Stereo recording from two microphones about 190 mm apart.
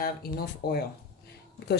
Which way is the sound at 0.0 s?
55° left (ahead or behind).